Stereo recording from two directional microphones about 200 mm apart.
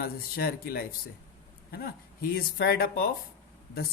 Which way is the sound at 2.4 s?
50° left (ahead or behind).